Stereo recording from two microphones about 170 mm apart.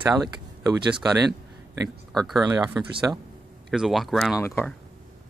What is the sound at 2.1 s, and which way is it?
Speech, centre (ahead or behind).